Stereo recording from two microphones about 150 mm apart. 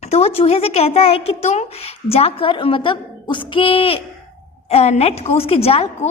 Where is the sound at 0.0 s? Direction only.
45° left (ahead or behind).